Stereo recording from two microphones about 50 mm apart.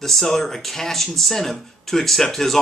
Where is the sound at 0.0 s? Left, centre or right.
Centre.